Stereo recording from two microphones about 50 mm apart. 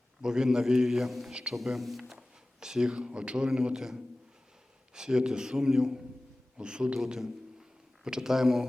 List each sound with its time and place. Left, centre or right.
0.2 s speech: centre
1.3 s a man's voice: centre
1.5 s a man's voice: centre
8.0 s speech: centre